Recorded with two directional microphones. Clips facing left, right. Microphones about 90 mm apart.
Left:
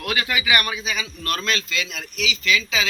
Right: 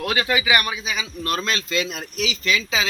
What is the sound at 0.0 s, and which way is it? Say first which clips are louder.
A man's voice: right 3 dB; 30° right (ahead or behind).